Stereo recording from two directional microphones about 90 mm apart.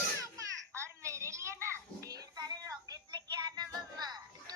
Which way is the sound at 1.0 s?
35° right (ahead or behind).